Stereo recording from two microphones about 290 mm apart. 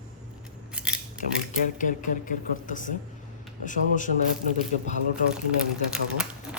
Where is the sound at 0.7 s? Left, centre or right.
Centre.